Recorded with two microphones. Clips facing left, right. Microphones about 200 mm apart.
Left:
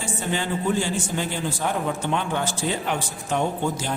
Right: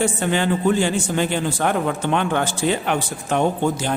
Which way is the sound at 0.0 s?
65° right (ahead or behind).